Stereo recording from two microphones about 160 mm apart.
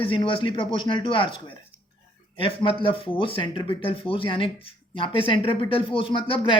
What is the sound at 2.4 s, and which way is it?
Speech, 35° left (ahead or behind).